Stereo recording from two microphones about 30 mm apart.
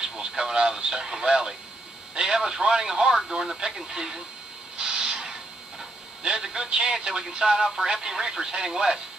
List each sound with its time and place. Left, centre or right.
0.0 s radio: right
0.4 s speech: right
4.7 s a sound: right
6.4 s speech: right
7.1 s speech: right